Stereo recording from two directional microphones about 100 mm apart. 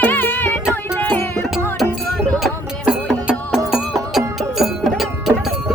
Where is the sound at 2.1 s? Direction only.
10° left (ahead or behind).